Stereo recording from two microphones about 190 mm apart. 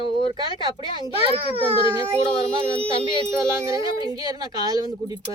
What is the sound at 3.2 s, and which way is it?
Speech, 15° right (ahead or behind).